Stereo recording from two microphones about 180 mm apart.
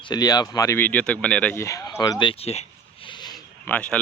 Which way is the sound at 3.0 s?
25° left (ahead or behind).